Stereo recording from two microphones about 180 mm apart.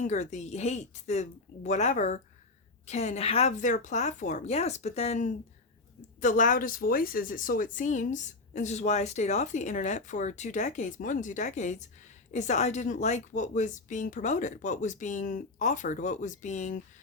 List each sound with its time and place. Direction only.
0.0 s a woman's voice: 40° left (ahead or behind)